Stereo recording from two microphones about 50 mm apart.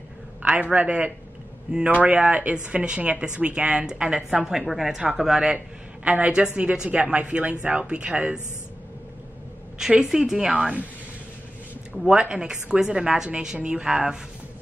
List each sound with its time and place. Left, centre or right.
0.5 s a woman's voice: right
6.0 s speech: right
9.8 s a woman's voice: centre
12.1 s a woman's voice: centre